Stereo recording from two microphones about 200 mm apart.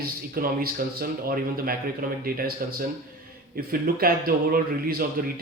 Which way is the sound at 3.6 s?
45° right (ahead or behind).